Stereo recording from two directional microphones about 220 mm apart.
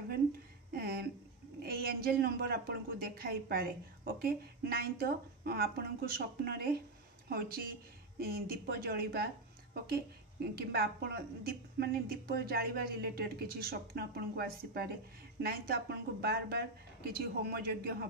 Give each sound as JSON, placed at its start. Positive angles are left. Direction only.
{"t": 0.7, "sound": "a sound", "side_deg": -45}
{"t": 1.6, "sound": "speech", "side_deg": -45}
{"t": 10.5, "sound": "speech", "side_deg": -45}